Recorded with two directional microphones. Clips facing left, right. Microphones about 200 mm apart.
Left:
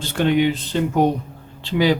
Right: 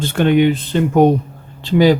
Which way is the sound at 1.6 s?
45° right (ahead or behind).